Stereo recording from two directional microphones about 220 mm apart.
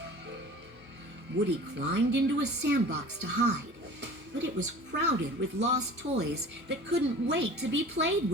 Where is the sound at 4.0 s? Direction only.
55° right (ahead or behind).